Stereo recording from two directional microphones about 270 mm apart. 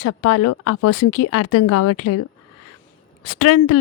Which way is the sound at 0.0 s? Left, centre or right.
Left.